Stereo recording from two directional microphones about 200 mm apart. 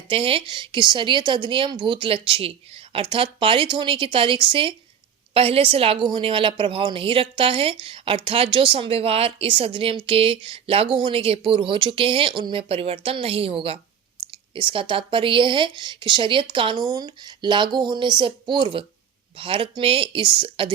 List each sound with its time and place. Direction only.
0.1 s a woman's voice: 30° right (ahead or behind)